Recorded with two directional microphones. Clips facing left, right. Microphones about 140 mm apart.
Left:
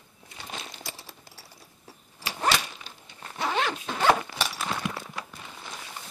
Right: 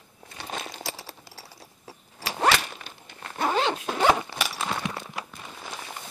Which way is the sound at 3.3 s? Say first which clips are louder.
Right 3 dB; 45° right (ahead or behind).